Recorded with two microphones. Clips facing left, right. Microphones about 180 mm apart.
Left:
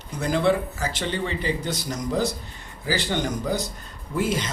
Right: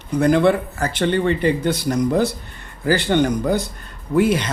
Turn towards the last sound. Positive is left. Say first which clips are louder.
# right 8 dB
turn(degrees=-65)  # may be behind; listen again after turning